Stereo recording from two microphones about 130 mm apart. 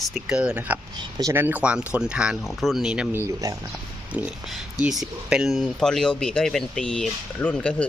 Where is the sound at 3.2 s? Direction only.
20° right (ahead or behind).